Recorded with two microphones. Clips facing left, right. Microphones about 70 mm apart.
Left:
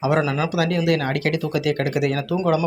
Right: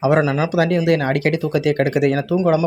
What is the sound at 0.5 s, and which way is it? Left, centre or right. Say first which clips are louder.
Speech: right 4 dB; right.